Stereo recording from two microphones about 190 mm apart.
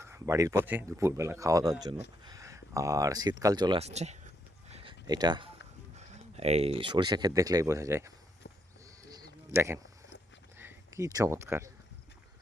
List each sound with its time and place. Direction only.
0.0 s speech: 15° right (ahead or behind); by 4.2 s 35° right (ahead or behind)
4.7 s a sound: 30° right (ahead or behind)
6.0 s speech: 35° right (ahead or behind); by 8.1 s 15° right (ahead or behind)
9.5 s speech: 15° right (ahead or behind)